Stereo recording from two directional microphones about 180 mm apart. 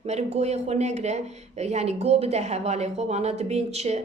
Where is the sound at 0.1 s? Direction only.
35° right (ahead or behind).